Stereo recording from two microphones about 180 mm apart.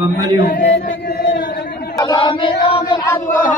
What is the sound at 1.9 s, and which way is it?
Chant, 20° left (ahead or behind).